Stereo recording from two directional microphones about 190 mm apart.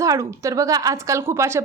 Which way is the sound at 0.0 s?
15° right (ahead or behind).